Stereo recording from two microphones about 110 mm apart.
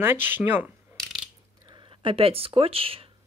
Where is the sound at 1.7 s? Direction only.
50° right (ahead or behind).